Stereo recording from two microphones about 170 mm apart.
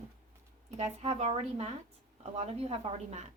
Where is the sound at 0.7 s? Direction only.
40° right (ahead or behind).